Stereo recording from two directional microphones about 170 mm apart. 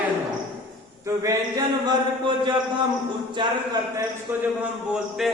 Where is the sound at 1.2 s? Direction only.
20° right (ahead or behind).